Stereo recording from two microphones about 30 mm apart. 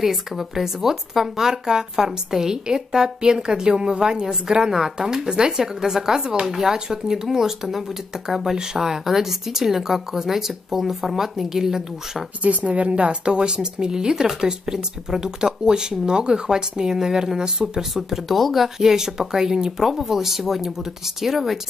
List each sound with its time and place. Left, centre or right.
0.0 s speech: centre
12.4 s a woman's voice: right
12.9 s speech: right; by 17.8 s centre
17.9 s speech: centre
18.8 s speech: centre